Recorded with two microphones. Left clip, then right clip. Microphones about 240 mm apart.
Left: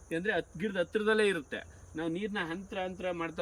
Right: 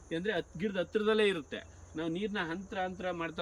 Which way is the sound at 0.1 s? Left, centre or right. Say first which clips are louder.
Left 2 dB; centre.